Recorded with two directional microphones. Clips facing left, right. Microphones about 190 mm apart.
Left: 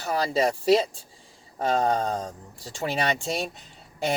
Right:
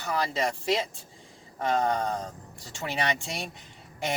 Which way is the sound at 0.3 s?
35° left (ahead or behind).